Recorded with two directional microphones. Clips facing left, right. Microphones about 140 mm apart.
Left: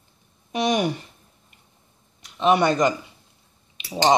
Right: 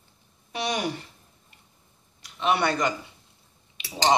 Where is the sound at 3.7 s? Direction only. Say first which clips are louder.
Left 4 dB; 25° left (ahead or behind).